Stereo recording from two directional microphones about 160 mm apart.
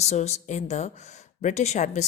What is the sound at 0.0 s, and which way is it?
Speech, 45° left (ahead or behind).